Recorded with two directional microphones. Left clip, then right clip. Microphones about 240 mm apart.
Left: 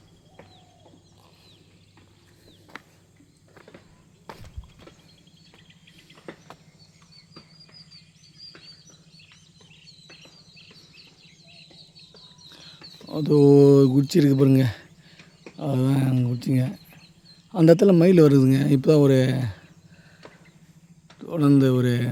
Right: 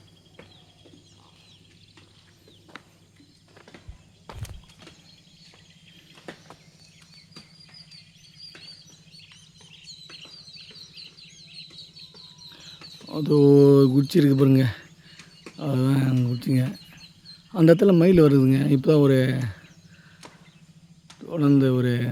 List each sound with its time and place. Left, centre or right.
2.7 s bird: left
4.3 s a sound: left
6.3 s a sound: right
12.5 s chicken: centre
13.1 s speech: centre
15.5 s bird: centre
17.5 s speech: centre
20.2 s a sound: right
21.2 s speech: centre